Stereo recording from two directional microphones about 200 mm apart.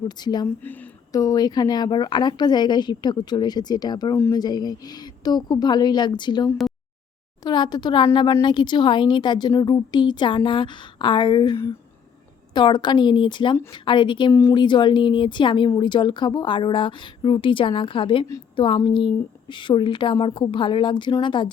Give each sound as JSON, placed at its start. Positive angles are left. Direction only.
{"t": 0.0, "sound": "a woman's voice", "side_deg": 20}
{"t": 0.4, "sound": "a woman's voice", "side_deg": 10}